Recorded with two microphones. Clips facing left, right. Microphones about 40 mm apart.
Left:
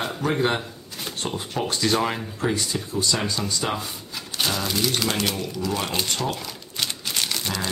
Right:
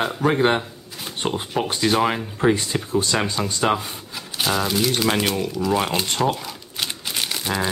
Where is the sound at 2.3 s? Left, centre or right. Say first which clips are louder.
Right 5 dB; right.